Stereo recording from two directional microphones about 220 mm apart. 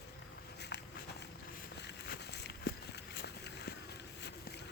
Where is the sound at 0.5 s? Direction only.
50° left (ahead or behind).